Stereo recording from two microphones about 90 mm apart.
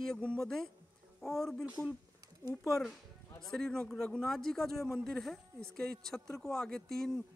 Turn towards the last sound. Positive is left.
turn(degrees=5)  # may be behind; listen again after turning